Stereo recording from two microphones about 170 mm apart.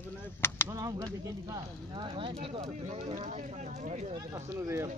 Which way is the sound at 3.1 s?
45° right (ahead or behind).